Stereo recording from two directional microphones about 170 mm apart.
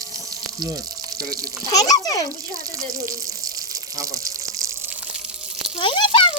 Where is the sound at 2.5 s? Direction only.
20° right (ahead or behind).